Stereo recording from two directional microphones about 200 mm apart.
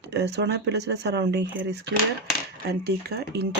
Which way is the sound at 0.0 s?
60° right (ahead or behind).